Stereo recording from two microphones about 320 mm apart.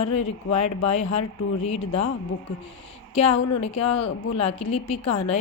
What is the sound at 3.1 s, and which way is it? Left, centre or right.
A woman's voice, centre.